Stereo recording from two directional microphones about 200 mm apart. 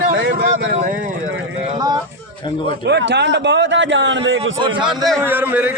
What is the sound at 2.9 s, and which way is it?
A man's voice, 60° right (ahead or behind).